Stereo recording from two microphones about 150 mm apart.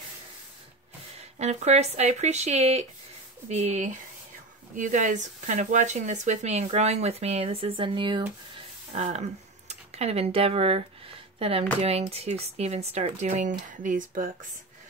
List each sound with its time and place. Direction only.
1.1 s speech: 45° right (ahead or behind)
8.9 s speech: 50° right (ahead or behind); by 14.5 s 65° right (ahead or behind)